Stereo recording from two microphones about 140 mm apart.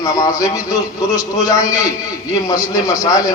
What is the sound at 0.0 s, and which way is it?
A man's voice, 25° left (ahead or behind).